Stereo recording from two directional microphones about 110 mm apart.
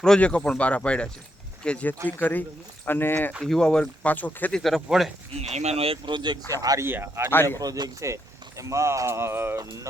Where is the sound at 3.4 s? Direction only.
5° left (ahead or behind).